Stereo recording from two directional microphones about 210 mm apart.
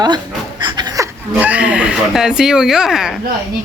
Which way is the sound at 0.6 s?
20° right (ahead or behind).